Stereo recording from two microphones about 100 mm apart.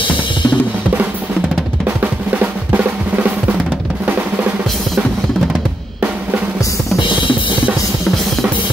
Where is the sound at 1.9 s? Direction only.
15° right (ahead or behind).